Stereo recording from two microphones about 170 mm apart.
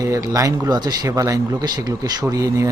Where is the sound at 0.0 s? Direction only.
20° right (ahead or behind).